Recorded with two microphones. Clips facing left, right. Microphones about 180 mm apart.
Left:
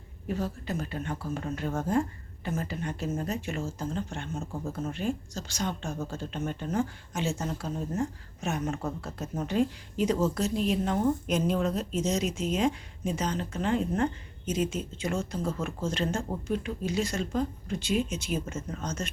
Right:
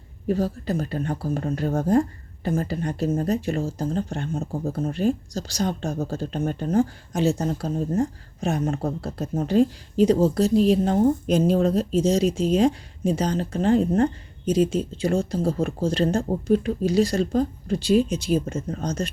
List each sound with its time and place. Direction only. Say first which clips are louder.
0.3 s speech: right 8 dB; 35° right (ahead or behind)